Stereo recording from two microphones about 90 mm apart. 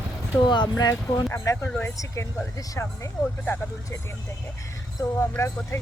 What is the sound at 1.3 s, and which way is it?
Speech, 30° left (ahead or behind).